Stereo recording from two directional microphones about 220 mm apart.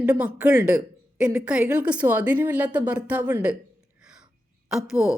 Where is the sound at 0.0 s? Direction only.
5° right (ahead or behind).